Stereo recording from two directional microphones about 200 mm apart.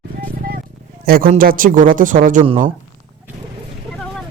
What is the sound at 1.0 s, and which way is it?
Speech, 45° right (ahead or behind).